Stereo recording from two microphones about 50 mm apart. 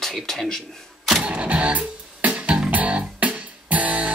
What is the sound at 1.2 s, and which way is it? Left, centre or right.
Music, right.